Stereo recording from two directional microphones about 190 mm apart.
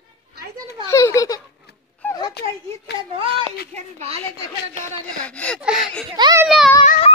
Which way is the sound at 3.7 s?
35° right (ahead or behind).